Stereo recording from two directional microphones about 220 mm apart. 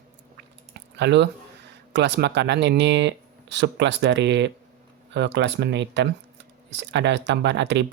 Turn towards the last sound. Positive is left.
turn(degrees=-55)  # may be behind; listen again after turning